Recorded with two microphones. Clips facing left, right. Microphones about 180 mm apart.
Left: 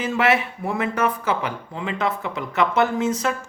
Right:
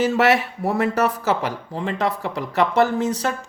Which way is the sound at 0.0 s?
40° right (ahead or behind).